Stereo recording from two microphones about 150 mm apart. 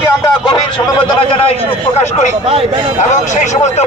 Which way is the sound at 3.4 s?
50° left (ahead or behind).